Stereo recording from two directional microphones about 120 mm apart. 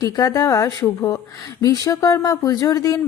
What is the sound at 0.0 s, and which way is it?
Speech, 30° left (ahead or behind).